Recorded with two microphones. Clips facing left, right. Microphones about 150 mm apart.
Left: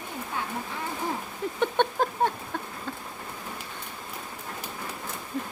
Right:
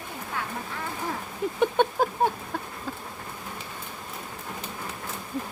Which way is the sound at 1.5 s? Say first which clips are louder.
Right 2 dB; 10° right (ahead or behind).